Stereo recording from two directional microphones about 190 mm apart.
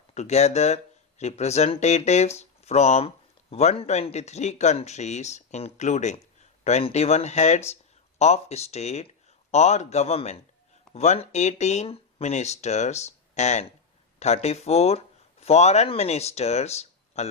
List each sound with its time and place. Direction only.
0.1 s speech: 35° left (ahead or behind)